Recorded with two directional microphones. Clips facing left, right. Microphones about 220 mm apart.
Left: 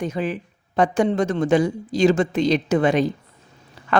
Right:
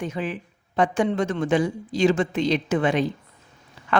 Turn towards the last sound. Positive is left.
turn(degrees=40)  # may be behind; listen again after turning